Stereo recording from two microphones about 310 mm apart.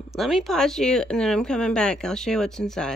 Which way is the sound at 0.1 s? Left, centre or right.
Centre.